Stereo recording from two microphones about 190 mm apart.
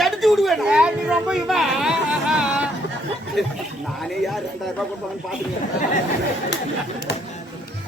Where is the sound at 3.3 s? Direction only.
Centre (ahead or behind).